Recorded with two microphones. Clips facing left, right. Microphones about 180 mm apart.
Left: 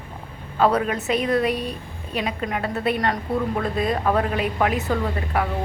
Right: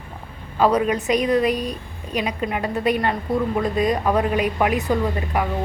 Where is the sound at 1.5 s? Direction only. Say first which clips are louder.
Right 2 dB; 35° right (ahead or behind).